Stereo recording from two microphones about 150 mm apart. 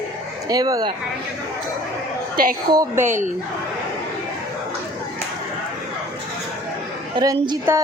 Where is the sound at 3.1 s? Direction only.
55° right (ahead or behind).